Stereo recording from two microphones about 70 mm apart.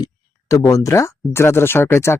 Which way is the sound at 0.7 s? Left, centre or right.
Left.